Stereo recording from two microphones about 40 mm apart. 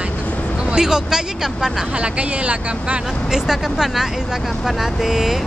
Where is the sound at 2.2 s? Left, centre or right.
Right.